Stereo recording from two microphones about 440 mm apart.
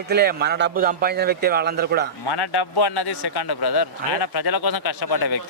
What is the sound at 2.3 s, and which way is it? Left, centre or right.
Speech, left.